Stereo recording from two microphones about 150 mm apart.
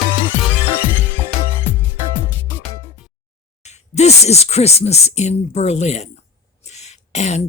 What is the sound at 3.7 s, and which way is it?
Speech, 45° left (ahead or behind).